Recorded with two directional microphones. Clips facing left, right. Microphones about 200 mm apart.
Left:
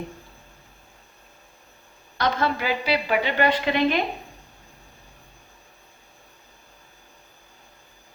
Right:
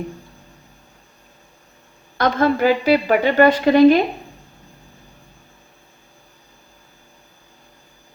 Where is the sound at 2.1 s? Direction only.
50° right (ahead or behind).